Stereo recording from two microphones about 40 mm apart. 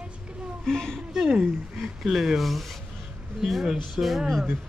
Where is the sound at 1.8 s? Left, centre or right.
Centre.